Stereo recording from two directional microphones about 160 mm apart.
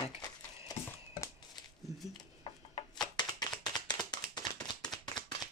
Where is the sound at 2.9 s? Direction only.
25° left (ahead or behind).